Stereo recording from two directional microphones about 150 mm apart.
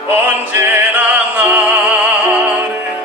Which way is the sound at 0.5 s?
10° right (ahead or behind).